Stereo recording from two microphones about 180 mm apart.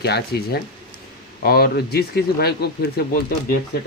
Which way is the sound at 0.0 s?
65° left (ahead or behind).